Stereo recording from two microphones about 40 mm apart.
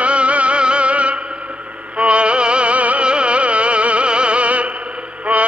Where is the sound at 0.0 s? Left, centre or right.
Right.